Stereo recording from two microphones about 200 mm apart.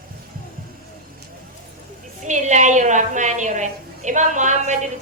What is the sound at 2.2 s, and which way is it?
A woman's voice, 35° right (ahead or behind).